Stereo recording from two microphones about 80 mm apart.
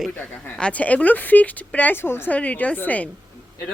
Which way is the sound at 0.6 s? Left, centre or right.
Centre.